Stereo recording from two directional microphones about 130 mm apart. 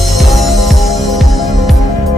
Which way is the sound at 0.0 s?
Centre (ahead or behind).